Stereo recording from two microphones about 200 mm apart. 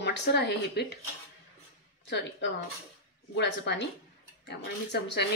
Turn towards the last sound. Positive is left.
turn(degrees=60)  # may be behind; listen again after turning